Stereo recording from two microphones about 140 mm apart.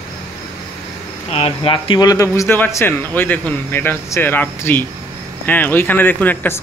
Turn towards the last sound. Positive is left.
turn(degrees=15)  # may be behind; listen again after turning